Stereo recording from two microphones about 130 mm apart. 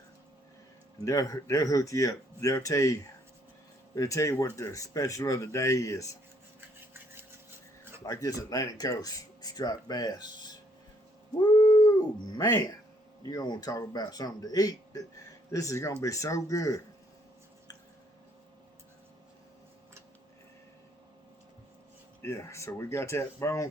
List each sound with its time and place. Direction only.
1.0 s speech: 25° left (ahead or behind)
8.0 s speech: 25° left (ahead or behind)
11.5 s howl: 30° left (ahead or behind)
13.2 s speech: 30° left (ahead or behind)
22.2 s speech: 20° left (ahead or behind)